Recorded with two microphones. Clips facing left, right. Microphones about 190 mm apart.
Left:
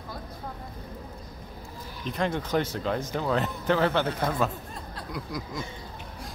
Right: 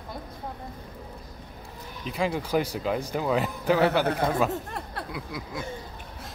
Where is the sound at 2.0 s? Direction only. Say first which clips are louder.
Right 1 dB; 5° right (ahead or behind).